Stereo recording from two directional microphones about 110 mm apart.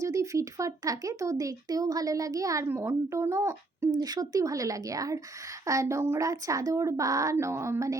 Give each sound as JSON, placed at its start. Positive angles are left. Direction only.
{"t": 0.0, "sound": "a woman's voice", "side_deg": -30}